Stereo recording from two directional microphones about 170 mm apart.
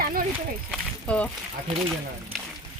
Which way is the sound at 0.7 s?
5° left (ahead or behind).